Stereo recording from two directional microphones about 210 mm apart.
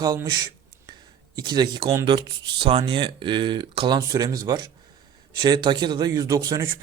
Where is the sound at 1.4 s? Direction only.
20° right (ahead or behind).